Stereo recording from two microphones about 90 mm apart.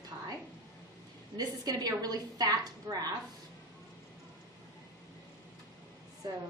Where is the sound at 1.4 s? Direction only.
45° right (ahead or behind).